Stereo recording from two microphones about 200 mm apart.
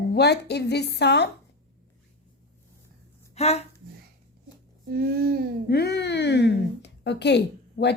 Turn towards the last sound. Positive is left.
turn(degrees=60)  # may be behind; listen again after turning